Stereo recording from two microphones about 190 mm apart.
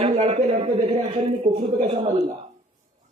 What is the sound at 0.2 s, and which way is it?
Speech, 35° right (ahead or behind).